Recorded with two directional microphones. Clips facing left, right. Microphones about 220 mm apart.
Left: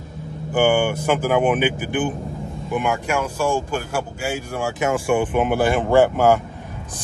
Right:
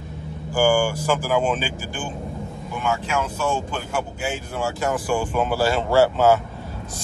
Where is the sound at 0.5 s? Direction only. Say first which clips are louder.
Left 1 dB; 20° left (ahead or behind).